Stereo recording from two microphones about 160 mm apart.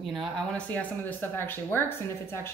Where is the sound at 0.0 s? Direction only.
Centre (ahead or behind).